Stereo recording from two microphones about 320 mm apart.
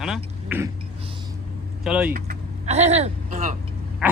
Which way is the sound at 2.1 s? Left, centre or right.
Right.